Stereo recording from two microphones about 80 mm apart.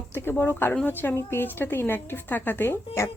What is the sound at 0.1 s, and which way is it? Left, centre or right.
A woman's voice, left.